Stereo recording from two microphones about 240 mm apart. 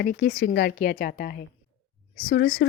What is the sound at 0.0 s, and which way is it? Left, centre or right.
A woman's voice, left.